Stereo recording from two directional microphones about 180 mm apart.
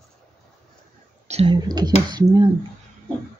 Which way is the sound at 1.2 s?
35° right (ahead or behind).